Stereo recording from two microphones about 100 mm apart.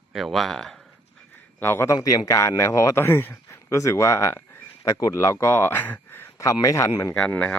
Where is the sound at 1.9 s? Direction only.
35° left (ahead or behind).